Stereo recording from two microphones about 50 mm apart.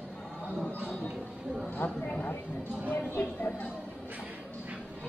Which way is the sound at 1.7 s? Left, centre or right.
Left.